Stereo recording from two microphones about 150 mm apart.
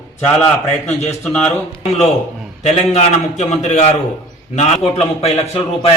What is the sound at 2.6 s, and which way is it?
A man's voice, 50° left (ahead or behind).